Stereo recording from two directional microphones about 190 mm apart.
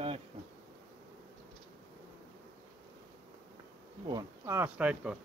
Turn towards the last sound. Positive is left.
turn(degrees=-5)  # may be behind; listen again after turning